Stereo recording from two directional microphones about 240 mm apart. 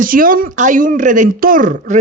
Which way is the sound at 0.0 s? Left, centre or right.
Right.